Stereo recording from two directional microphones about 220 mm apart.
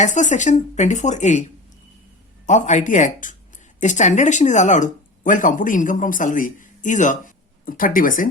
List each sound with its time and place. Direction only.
0.0 s speech: 35° left (ahead or behind)
2.5 s speech: 35° left (ahead or behind)